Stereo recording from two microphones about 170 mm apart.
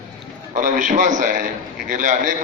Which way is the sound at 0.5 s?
50° right (ahead or behind).